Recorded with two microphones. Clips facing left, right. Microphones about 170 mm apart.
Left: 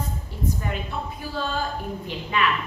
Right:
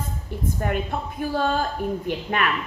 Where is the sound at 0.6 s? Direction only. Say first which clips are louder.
Right 4 dB; 55° right (ahead or behind).